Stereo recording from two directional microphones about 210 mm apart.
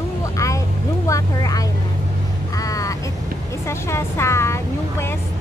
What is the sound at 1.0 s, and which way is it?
Vehicle, 15° left (ahead or behind).